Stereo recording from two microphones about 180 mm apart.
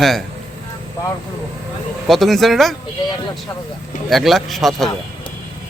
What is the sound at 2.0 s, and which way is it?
Speech, centre (ahead or behind).